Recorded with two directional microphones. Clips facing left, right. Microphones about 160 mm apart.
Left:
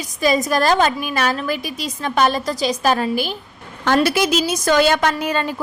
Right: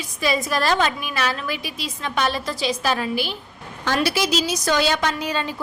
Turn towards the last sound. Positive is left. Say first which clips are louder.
# left 4 dB
turn(degrees=50)  # may be behind; listen again after turning